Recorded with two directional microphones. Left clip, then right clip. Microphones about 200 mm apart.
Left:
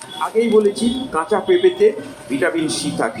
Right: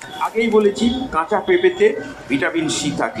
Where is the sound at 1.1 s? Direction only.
15° right (ahead or behind).